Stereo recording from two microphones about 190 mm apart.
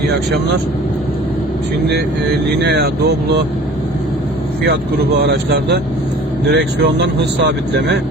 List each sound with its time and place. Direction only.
2.6 s speech: 60° right (ahead or behind)
5.2 s speech: 60° right (ahead or behind)